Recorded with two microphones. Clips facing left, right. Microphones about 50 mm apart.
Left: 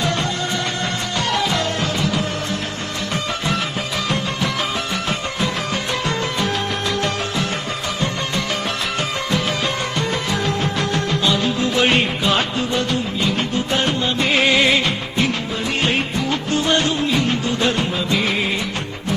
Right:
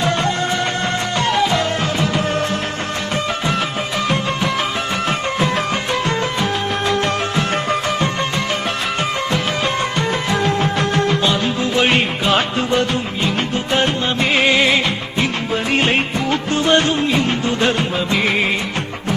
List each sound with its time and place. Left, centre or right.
6.8 s music: right
10.1 s music: right
10.6 s music: right
11.8 s music: centre
12.5 s music: right
14.3 s music: centre
15.7 s music: right